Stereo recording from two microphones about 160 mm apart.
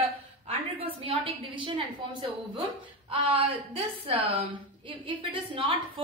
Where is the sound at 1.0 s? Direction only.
35° right (ahead or behind).